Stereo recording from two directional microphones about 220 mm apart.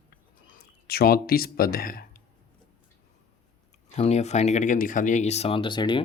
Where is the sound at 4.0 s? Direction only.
30° left (ahead or behind).